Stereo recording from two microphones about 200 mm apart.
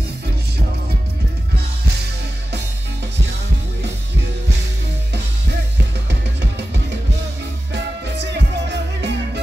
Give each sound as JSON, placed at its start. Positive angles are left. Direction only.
{"t": 7.7, "sound": "music", "side_deg": -60}